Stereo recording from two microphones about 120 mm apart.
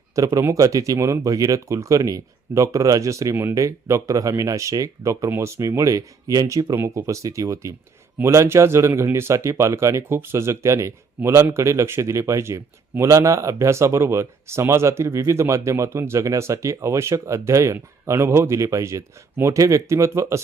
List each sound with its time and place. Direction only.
0.2 s speech: 30° right (ahead or behind)